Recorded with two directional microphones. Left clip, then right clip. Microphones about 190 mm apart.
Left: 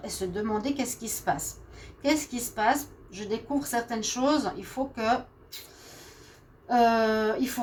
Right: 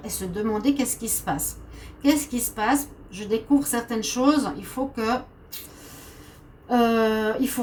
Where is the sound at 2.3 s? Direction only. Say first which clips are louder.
Right 1 dB; 40° left (ahead or behind).